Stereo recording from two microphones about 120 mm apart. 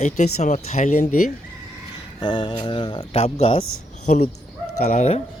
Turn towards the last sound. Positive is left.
turn(degrees=65)  # may be behind; listen again after turning